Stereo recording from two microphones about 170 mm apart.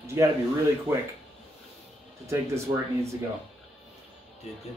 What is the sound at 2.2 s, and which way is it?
Speech, 15° right (ahead or behind).